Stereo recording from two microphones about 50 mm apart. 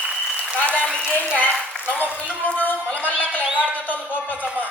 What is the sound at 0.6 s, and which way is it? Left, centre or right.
Speech, left.